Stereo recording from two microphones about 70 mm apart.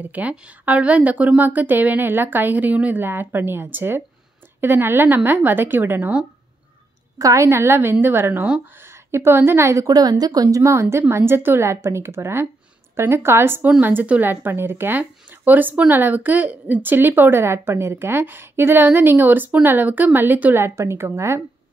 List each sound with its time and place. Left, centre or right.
0.1 s speech: right
7.2 s a woman's voice: right
9.8 s a woman's voice: right
20.5 s a woman's voice: right